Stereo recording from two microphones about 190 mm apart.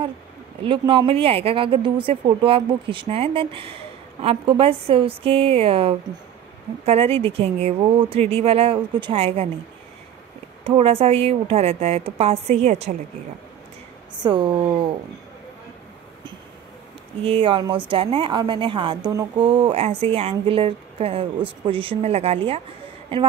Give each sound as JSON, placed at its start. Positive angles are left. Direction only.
{"t": 0.7, "sound": "a woman's voice", "side_deg": -25}
{"t": 10.6, "sound": "a woman's voice", "side_deg": -30}
{"t": 14.2, "sound": "speech", "side_deg": -25}
{"t": 17.2, "sound": "speech", "side_deg": -30}